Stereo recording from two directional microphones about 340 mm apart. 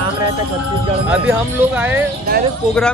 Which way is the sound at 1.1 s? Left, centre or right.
Centre.